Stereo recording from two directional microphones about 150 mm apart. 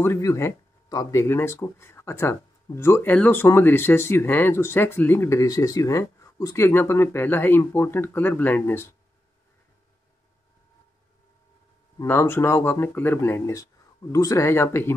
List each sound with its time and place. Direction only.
0.0 s speech: 20° left (ahead or behind)
12.0 s speech: 15° left (ahead or behind)